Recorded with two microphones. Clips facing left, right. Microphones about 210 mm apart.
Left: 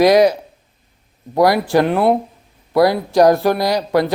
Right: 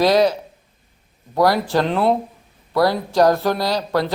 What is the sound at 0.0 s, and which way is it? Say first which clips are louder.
Speech: left 4 dB; 15° left (ahead or behind).